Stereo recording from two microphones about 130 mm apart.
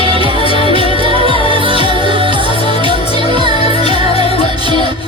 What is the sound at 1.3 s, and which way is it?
Music, 45° left (ahead or behind).